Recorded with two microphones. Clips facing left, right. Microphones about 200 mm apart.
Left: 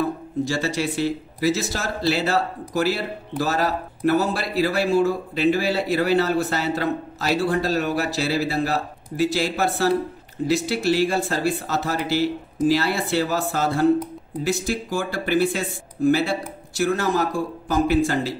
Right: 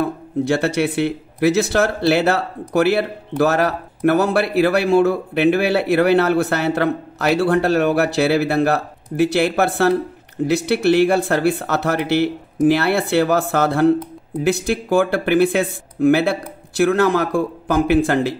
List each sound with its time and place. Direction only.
0.0 s speech: 60° right (ahead or behind)